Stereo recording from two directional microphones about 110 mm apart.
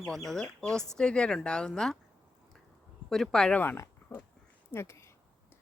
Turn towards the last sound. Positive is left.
turn(degrees=25)  # may be behind; listen again after turning